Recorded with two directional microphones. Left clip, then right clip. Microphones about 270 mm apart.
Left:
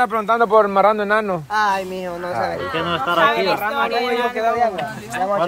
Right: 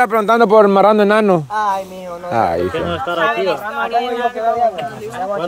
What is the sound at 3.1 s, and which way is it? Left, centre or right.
A man's voice, left.